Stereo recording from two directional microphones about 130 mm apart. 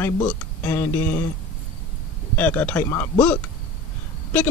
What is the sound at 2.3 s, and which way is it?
Speech, 15° left (ahead or behind).